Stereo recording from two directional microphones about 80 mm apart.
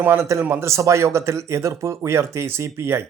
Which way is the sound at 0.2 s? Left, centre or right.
Right.